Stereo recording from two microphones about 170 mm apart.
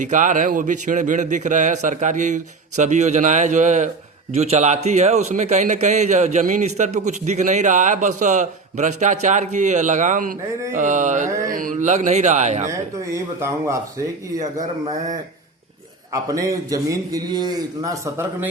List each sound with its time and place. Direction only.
0.0 s a man's voice: 45° right (ahead or behind)
12.7 s speech: 15° right (ahead or behind)
14.3 s a man's voice: 45° right (ahead or behind)
16.1 s a man's voice: 20° right (ahead or behind)